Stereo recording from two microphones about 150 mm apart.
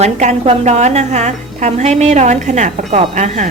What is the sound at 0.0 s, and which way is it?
A woman's voice, 50° right (ahead or behind).